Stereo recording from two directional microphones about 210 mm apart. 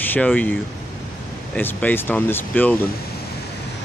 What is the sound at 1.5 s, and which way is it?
Speech, 10° left (ahead or behind).